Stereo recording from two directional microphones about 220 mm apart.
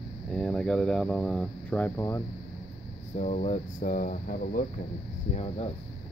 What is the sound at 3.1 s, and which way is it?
Speech, 30° left (ahead or behind).